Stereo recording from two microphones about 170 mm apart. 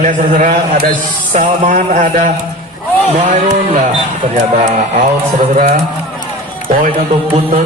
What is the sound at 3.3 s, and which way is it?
Speech, 45° right (ahead or behind).